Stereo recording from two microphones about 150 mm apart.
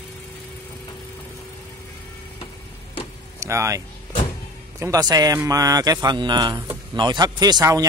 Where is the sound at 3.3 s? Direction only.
20° right (ahead or behind).